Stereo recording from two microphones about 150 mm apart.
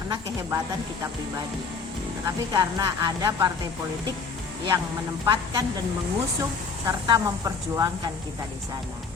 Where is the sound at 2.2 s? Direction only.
25° right (ahead or behind).